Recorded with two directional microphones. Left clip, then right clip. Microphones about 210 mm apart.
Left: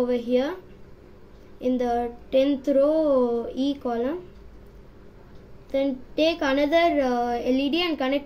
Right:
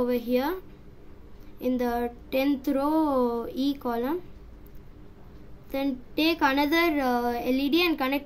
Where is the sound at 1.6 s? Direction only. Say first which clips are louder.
Left 3 dB; 55° right (ahead or behind).